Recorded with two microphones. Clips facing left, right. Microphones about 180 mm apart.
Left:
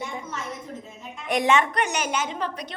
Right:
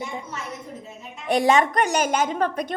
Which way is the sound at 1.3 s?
35° right (ahead or behind).